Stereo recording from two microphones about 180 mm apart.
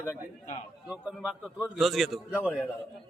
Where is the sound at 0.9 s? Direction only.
5° right (ahead or behind).